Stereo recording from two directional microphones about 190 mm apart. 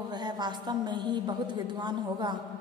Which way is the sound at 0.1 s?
20° right (ahead or behind).